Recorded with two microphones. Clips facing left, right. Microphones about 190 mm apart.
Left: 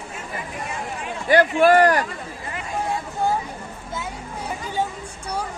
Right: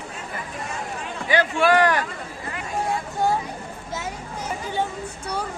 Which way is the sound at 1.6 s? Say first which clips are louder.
Left 2 dB; 45° left (ahead or behind).